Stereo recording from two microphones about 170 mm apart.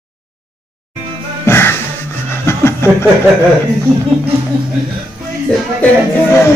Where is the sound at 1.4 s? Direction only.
15° left (ahead or behind).